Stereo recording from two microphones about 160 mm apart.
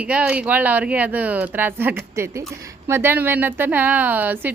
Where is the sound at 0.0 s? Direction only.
10° right (ahead or behind).